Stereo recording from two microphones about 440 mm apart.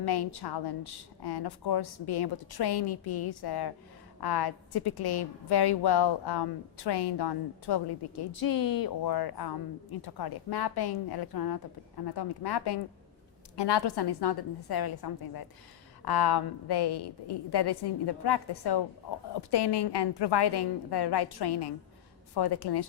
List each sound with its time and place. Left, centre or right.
0.0 s a woman's voice: left